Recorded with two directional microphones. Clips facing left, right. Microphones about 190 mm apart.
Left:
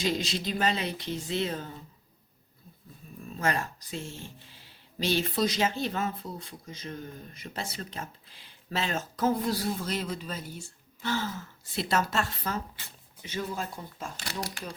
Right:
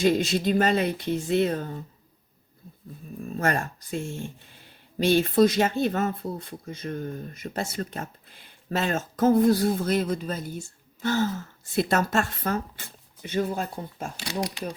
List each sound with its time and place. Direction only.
0.0 s speech: 55° right (ahead or behind)
3.2 s speech: 50° right (ahead or behind)